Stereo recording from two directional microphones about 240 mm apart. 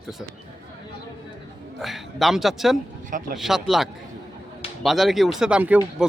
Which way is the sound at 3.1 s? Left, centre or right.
Right.